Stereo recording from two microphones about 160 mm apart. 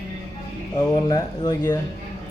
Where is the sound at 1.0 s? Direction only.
25° left (ahead or behind).